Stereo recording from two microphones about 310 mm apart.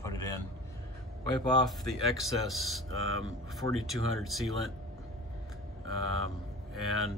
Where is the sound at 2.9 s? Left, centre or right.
Right.